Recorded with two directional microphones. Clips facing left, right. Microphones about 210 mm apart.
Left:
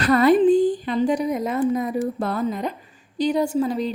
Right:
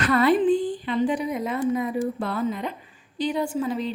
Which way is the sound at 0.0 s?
40° left (ahead or behind).